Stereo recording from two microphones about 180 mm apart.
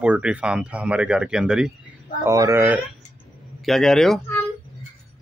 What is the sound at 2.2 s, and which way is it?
Speech, 15° right (ahead or behind).